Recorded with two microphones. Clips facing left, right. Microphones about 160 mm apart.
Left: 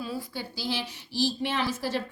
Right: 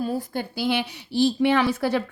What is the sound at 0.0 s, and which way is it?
A woman's voice, 50° right (ahead or behind).